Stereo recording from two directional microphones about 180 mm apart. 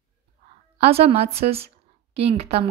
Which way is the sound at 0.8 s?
35° right (ahead or behind).